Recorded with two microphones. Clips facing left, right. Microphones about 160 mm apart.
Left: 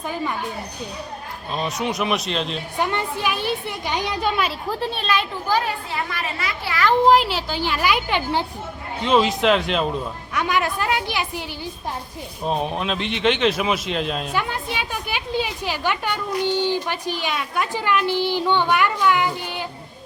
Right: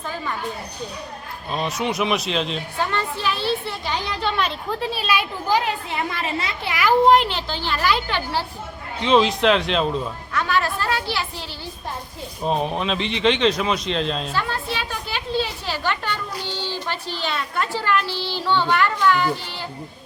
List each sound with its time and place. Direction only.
1.5 s a woman's voice: centre (ahead or behind)
2.7 s a woman's voice: 15° left (ahead or behind); by 6.8 s 20° right (ahead or behind)
6.8 s a woman's voice: centre (ahead or behind); by 8.4 s 20° left (ahead or behind)
9.0 s a woman's voice: 5° left (ahead or behind)
10.3 s a woman's voice: 15° left (ahead or behind)
12.5 s a woman's voice: centre (ahead or behind)
14.4 s a woman's voice: 15° left (ahead or behind)